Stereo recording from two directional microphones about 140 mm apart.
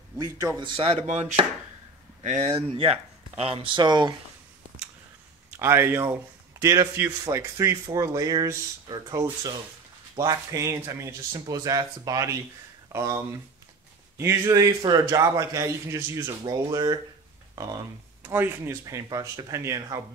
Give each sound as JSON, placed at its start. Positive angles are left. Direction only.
{"t": 0.6, "sound": "speech", "side_deg": -45}
{"t": 2.2, "sound": "speech", "side_deg": -55}
{"t": 2.5, "sound": "speech", "side_deg": -40}
{"t": 5.5, "sound": "a man's voice", "side_deg": -20}
{"t": 18.2, "sound": "speech", "side_deg": -15}